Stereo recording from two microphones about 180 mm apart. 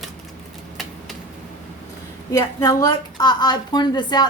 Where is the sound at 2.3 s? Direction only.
20° left (ahead or behind).